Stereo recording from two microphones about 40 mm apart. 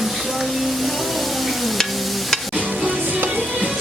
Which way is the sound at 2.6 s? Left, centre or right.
Right.